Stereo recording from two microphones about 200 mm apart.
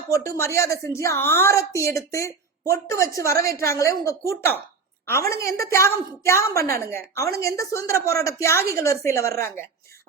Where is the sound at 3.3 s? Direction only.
50° right (ahead or behind).